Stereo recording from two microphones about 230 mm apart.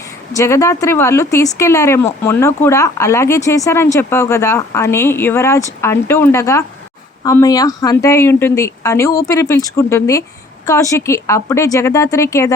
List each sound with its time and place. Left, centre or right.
0.3 s speech: centre